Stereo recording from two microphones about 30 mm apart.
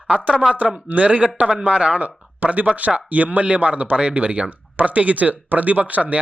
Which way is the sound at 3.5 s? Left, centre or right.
Right.